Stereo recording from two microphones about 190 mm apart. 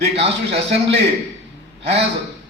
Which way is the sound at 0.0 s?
30° right (ahead or behind).